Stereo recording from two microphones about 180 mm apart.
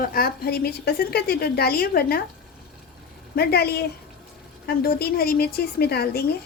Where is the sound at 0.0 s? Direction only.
55° left (ahead or behind).